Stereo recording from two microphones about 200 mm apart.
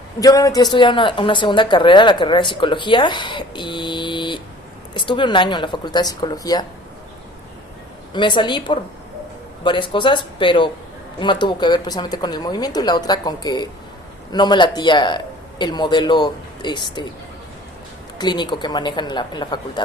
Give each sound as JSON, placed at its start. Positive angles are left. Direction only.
{"t": 0.2, "sound": "a woman's voice", "side_deg": 15}
{"t": 8.1, "sound": "a woman's voice", "side_deg": 25}
{"t": 18.2, "sound": "a woman's voice", "side_deg": 20}